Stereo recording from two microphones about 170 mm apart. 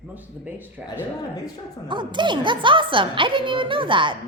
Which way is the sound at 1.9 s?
25° right (ahead or behind).